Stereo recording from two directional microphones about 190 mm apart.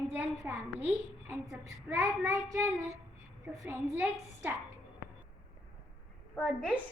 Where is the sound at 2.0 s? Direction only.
15° right (ahead or behind).